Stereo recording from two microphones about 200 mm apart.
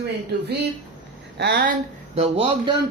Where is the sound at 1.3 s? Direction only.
55° right (ahead or behind).